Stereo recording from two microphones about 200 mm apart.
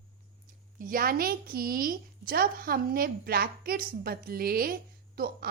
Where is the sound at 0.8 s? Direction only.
45° right (ahead or behind).